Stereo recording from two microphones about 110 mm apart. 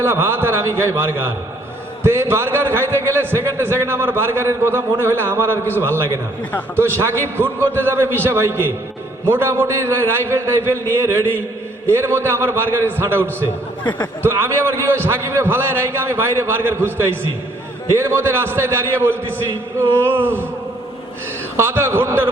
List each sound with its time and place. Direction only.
0.0 s a man's voice: 20° right (ahead or behind)
11.9 s a man's voice: 20° right (ahead or behind)
14.3 s a man's voice: 20° right (ahead or behind)
21.5 s a man's voice: 20° right (ahead or behind)